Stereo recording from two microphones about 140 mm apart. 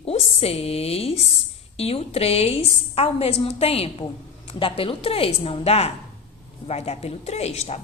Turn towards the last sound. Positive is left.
turn(degrees=50)  # may be behind; listen again after turning